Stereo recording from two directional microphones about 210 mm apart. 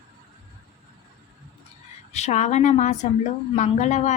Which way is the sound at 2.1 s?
35° left (ahead or behind).